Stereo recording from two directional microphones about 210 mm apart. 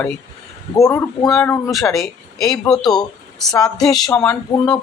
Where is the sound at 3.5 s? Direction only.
15° left (ahead or behind).